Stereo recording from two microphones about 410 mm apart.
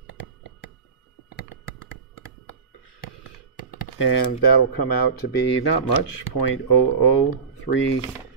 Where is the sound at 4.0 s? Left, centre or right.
Left.